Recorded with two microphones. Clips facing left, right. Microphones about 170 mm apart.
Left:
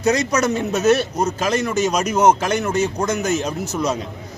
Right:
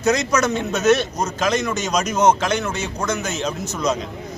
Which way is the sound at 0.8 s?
35° left (ahead or behind).